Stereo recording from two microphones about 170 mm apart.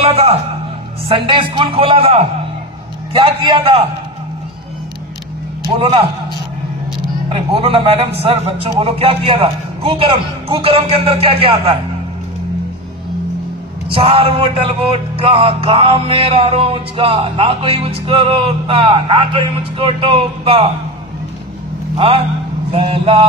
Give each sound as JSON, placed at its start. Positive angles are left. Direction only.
{"t": 0.0, "sound": "a man's voice", "side_deg": -35}
{"t": 1.0, "sound": "music", "side_deg": -30}
{"t": 5.8, "sound": "music", "side_deg": -35}
{"t": 7.3, "sound": "music", "side_deg": -35}
{"t": 13.8, "sound": "music", "side_deg": -35}
{"t": 21.9, "sound": "a man's voice", "side_deg": -35}
{"t": 22.7, "sound": "music", "side_deg": -30}